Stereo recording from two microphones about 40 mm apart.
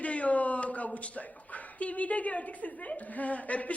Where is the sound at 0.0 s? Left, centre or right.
Left.